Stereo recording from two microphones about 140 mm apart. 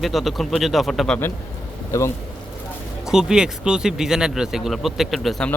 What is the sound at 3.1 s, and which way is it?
Speech, 5° right (ahead or behind).